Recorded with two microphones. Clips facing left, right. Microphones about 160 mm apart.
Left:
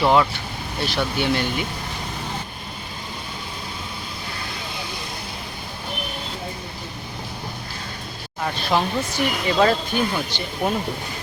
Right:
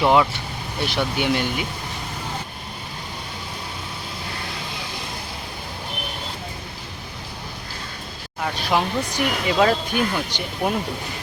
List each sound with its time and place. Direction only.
0.0 s speech: 15° right (ahead or behind)
8.7 s speech: 10° right (ahead or behind)